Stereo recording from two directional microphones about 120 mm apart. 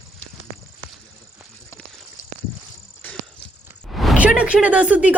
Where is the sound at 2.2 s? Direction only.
90° left.